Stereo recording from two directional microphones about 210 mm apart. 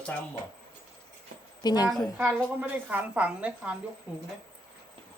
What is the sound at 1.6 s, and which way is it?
Speech, 20° left (ahead or behind).